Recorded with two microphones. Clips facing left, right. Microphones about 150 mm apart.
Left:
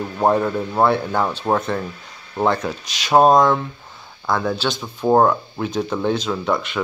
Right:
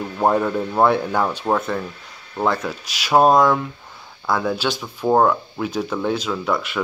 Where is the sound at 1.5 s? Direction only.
5° left (ahead or behind).